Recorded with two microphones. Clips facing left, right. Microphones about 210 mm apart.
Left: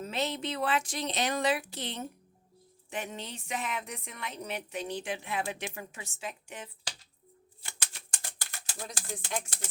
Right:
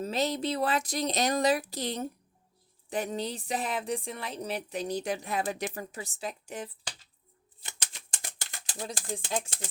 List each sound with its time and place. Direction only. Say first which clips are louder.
0.0 s speech: right 4 dB; 35° right (ahead or behind)
8.1 s a sound: right 2 dB; 20° right (ahead or behind)
8.9 s speech: right 4 dB; 25° right (ahead or behind)